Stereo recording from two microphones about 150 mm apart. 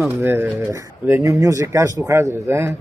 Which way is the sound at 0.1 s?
15° right (ahead or behind).